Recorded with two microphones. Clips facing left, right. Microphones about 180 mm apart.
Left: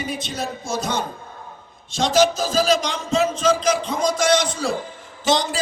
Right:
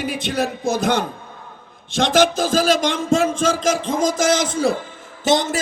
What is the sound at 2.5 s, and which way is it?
A man's voice, 50° right (ahead or behind).